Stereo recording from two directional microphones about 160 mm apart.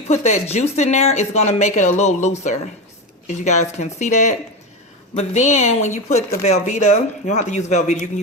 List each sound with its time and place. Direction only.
0.1 s speech: 45° left (ahead or behind)